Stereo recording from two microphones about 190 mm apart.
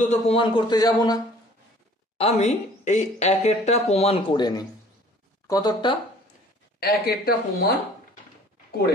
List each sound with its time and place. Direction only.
0.0 s speech: 35° left (ahead or behind)
2.1 s speech: 35° left (ahead or behind)
6.8 s speech: 55° left (ahead or behind)